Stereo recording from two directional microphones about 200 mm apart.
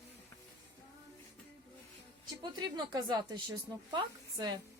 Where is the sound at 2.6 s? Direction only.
20° right (ahead or behind).